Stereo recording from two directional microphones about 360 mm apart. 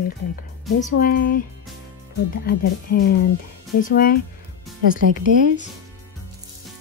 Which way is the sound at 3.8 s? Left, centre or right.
Left.